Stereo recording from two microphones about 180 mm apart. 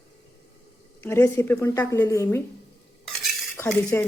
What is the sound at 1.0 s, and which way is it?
A woman's voice, 15° left (ahead or behind).